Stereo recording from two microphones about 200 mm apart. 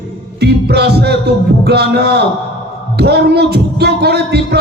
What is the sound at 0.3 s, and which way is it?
Music, 55° right (ahead or behind).